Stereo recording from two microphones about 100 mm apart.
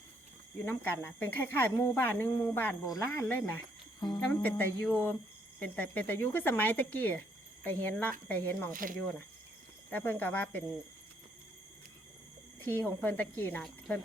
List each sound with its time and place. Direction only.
0.6 s speech: 25° left (ahead or behind)
2.8 s speech: 35° left (ahead or behind)
12.5 s speech: 20° left (ahead or behind)